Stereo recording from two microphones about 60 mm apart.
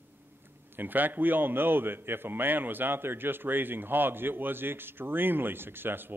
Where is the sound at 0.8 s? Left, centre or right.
Right.